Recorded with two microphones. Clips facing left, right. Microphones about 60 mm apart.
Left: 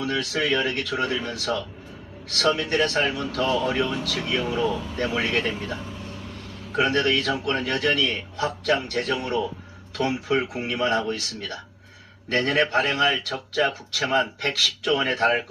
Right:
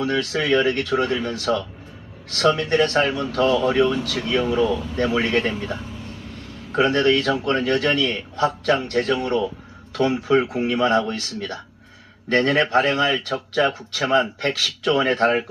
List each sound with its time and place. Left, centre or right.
0.0 s speech: right
6.7 s speech: right